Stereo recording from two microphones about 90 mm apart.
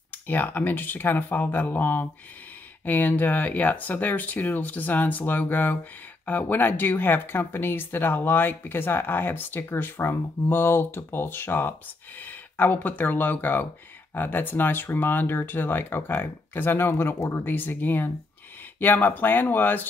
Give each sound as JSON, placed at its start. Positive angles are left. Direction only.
{"t": 0.3, "sound": "speech", "side_deg": 20}